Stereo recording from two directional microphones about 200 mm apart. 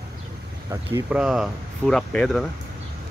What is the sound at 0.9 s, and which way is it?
Speech, 5° right (ahead or behind).